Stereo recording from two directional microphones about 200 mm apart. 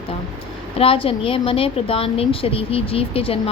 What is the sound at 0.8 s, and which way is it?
A woman's voice, 25° left (ahead or behind).